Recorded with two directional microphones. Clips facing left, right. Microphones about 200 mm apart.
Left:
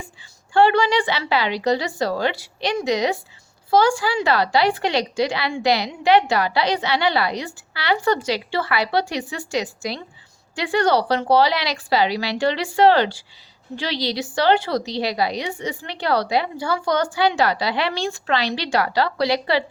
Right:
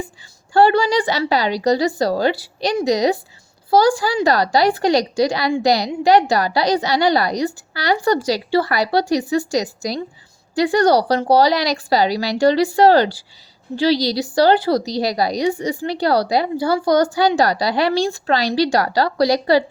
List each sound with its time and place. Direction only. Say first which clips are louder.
0.5 s speech: right 2 dB; 35° right (ahead or behind)